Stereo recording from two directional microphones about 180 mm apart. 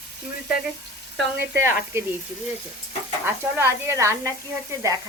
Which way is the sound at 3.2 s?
15° right (ahead or behind).